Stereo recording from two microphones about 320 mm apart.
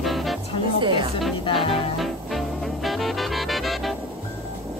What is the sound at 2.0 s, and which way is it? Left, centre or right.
Music, centre.